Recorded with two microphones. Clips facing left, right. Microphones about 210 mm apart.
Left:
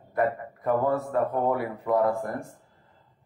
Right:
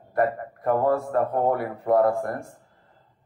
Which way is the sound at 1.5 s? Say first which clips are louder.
Right 4 dB; 50° right (ahead or behind).